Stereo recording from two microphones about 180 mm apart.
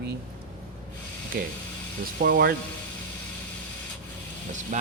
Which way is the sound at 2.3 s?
60° right (ahead or behind).